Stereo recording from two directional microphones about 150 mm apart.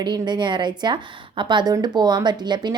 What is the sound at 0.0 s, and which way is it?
A woman's voice, 30° right (ahead or behind).